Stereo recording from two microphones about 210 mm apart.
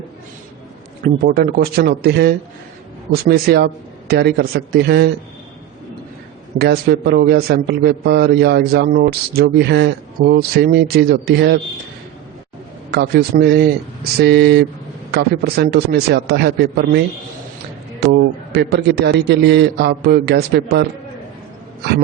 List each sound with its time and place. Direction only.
1.0 s a man's voice: 45° right (ahead or behind)
6.6 s a man's voice: 50° right (ahead or behind)
12.9 s a man's voice: 50° right (ahead or behind)
18.0 s a man's voice: 50° right (ahead or behind)